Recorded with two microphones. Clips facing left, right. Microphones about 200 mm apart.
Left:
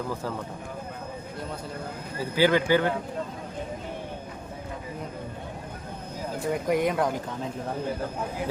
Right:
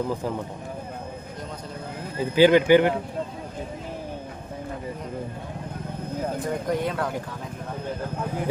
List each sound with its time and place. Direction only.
0.1 s speech: 15° right (ahead or behind)
2.3 s speech: 20° right (ahead or behind)
6.7 s speech: 15° left (ahead or behind)